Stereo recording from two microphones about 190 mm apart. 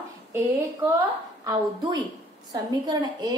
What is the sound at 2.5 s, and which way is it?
Speech, 20° right (ahead or behind).